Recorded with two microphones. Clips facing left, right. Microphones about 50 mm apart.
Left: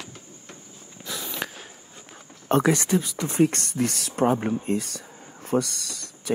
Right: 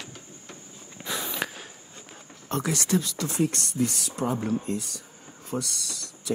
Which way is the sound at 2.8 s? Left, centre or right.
Centre.